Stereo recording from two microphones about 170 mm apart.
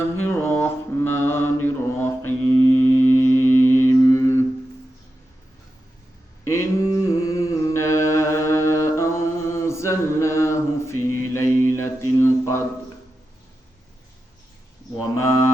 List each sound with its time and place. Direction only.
0.2 s mantra: 15° left (ahead or behind)
6.4 s mantra: 15° left (ahead or behind)
14.9 s cattle: 15° left (ahead or behind)